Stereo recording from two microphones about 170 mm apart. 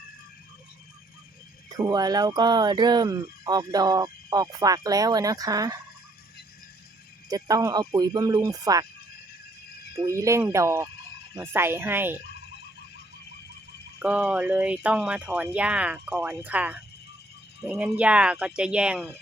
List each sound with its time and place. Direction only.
1.7 s speech: 20° right (ahead or behind)
7.3 s speech: 20° right (ahead or behind)
9.9 s speech: 15° right (ahead or behind)
14.0 s speech: 5° right (ahead or behind)